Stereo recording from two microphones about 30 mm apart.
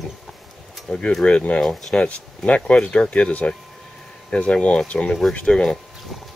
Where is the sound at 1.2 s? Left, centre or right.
Left.